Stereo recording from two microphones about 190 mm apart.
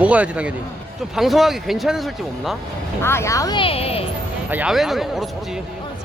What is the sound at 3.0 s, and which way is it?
Speech, 15° left (ahead or behind).